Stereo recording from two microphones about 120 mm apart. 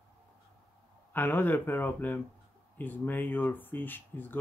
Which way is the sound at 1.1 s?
15° left (ahead or behind).